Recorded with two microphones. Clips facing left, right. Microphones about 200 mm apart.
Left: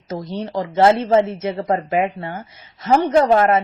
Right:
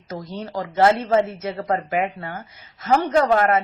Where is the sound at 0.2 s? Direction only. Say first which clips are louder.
Left 4 dB; 25° left (ahead or behind).